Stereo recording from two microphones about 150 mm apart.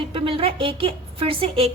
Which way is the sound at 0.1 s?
40° right (ahead or behind).